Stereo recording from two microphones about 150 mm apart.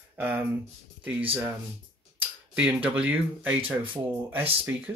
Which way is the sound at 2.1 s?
10° right (ahead or behind).